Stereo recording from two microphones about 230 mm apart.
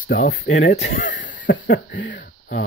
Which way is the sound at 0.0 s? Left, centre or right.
Left.